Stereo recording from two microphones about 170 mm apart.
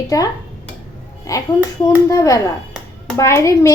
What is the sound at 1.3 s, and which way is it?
A child's voice, 20° left (ahead or behind).